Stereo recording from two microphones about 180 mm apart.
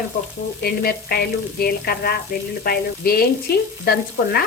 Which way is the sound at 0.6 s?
55° left (ahead or behind).